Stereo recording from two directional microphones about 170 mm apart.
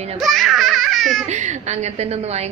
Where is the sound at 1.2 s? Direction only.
45° right (ahead or behind).